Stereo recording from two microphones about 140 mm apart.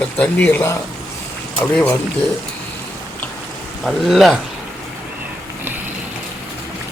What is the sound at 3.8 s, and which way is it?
Speech, centre (ahead or behind).